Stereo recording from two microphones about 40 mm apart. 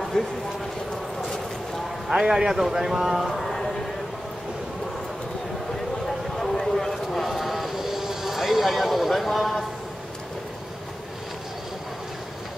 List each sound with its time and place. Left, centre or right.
0.2 s speech: centre
2.0 s a man's voice: centre
3.3 s a sound: centre
6.0 s vehicle: centre